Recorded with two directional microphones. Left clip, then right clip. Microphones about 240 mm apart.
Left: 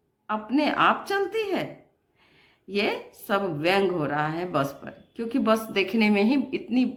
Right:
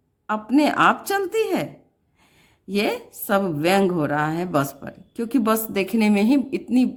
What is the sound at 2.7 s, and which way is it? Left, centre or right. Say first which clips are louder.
Speech: right 3 dB; right.